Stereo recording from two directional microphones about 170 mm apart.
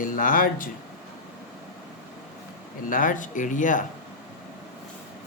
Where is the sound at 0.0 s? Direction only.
55° left (ahead or behind).